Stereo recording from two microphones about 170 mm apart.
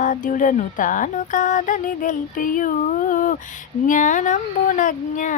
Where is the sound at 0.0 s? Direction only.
50° left (ahead or behind).